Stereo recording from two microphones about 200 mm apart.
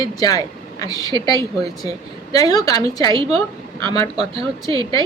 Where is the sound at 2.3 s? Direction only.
20° left (ahead or behind).